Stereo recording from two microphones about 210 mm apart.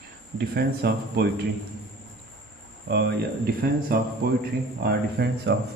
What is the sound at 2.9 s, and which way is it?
A man's voice, 50° right (ahead or behind).